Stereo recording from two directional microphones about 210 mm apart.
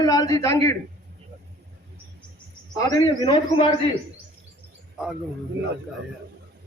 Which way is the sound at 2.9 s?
20° left (ahead or behind).